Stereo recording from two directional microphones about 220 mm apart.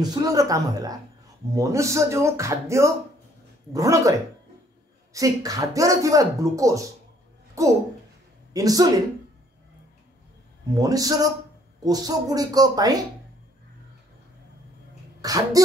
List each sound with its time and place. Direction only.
0.0 s speech: 15° right (ahead or behind)
5.1 s speech: 15° right (ahead or behind)
10.8 s speech: 15° right (ahead or behind)
15.2 s speech: 15° right (ahead or behind)